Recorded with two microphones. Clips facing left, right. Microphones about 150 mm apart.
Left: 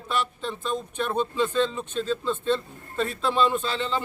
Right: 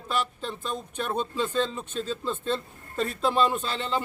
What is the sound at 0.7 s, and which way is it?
A man's voice, 40° right (ahead or behind).